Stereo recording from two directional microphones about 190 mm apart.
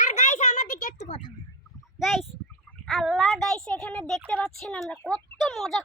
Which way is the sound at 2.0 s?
Centre (ahead or behind).